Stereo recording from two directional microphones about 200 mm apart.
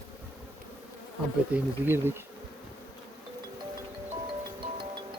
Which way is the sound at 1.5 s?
10° right (ahead or behind).